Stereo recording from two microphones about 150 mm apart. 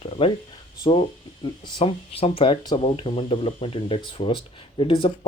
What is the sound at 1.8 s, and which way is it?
Speech, 40° left (ahead or behind).